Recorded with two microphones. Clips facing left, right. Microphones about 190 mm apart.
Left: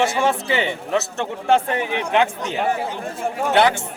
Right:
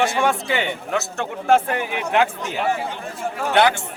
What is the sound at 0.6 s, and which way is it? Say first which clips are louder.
Speech: left 2 dB; 30° left (ahead or behind).